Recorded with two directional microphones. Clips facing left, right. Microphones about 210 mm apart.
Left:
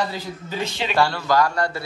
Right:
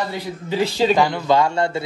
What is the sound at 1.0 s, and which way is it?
Speech, 20° right (ahead or behind).